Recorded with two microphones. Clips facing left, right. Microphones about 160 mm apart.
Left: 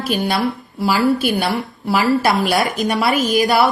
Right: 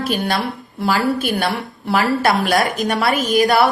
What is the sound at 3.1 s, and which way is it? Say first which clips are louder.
Speech: right 2 dB; 45° right (ahead or behind).